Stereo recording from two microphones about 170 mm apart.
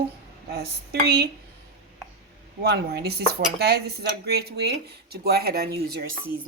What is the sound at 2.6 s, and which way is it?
Speech, 75° right (ahead or behind).